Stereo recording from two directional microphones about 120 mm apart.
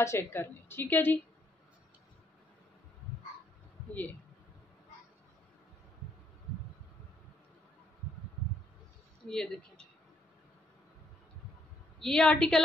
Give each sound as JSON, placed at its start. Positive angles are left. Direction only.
{"t": 0.0, "sound": "a woman's voice", "side_deg": 20}
{"t": 9.3, "sound": "speech", "side_deg": 5}
{"t": 12.0, "sound": "a woman's voice", "side_deg": 5}